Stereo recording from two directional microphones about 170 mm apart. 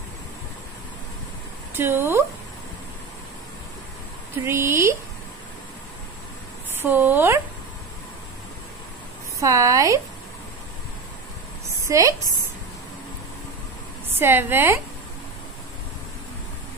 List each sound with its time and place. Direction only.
1.8 s speech: 15° right (ahead or behind)
4.4 s a woman's voice: 15° right (ahead or behind)
6.8 s a woman's voice: 10° right (ahead or behind)
9.4 s speech: 20° right (ahead or behind)
11.9 s speech: 20° right (ahead or behind)
14.1 s a woman's voice: 15° right (ahead or behind)